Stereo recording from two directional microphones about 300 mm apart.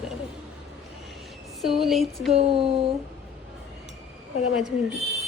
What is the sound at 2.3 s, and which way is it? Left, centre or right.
Speech, centre.